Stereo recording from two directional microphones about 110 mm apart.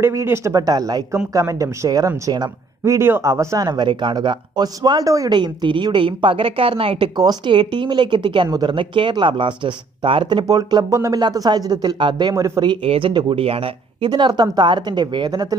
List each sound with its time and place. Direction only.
0.0 s speech: 25° right (ahead or behind)
2.8 s speech: 25° right (ahead or behind); by 7.1 s 55° right (ahead or behind)
7.2 s speech: 40° right (ahead or behind)
10.4 s speech: 35° right (ahead or behind)
12.4 s speech: 30° right (ahead or behind)
12.8 s speech: 60° right (ahead or behind); by 15.4 s 40° right (ahead or behind)